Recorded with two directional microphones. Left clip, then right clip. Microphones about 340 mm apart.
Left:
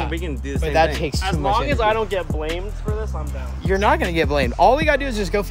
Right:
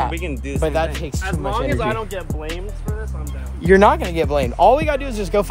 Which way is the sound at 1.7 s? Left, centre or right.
Left.